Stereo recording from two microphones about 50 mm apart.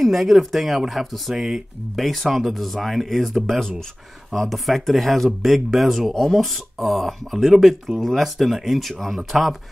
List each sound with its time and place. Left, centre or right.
0.0 s speech: centre